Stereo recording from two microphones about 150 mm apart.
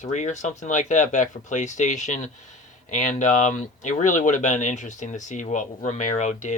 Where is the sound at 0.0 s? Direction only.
55° left (ahead or behind).